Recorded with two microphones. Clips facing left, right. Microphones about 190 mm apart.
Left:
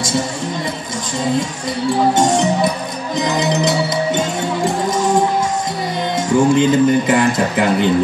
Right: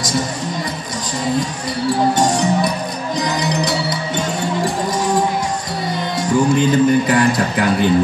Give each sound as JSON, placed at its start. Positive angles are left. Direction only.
{"t": 2.1, "sound": "speech", "side_deg": 25}
{"t": 6.1, "sound": "speech", "side_deg": 20}